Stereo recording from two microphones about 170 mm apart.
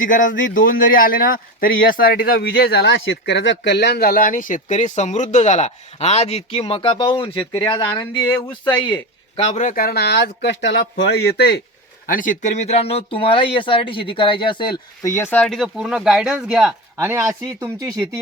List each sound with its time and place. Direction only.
0.0 s a man's voice: 50° left (ahead or behind); by 11.6 s 70° left (ahead or behind)
12.0 s speech: 50° left (ahead or behind); by 15.1 s 25° left (ahead or behind)
15.1 s speech: 10° left (ahead or behind)
17.0 s speech: 15° right (ahead or behind)